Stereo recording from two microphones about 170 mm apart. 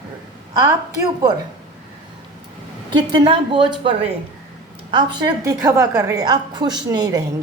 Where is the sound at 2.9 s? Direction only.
25° right (ahead or behind).